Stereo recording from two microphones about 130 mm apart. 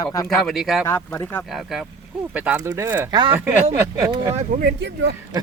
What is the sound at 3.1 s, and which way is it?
Speech, 35° right (ahead or behind).